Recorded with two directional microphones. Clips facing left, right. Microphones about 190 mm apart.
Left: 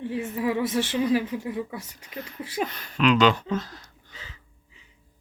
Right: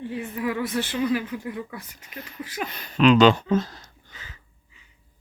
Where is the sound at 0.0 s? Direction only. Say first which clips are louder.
Left 1 dB; 25° left (ahead or behind).